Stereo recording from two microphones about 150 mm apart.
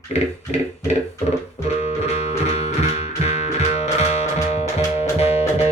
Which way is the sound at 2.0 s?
45° left (ahead or behind).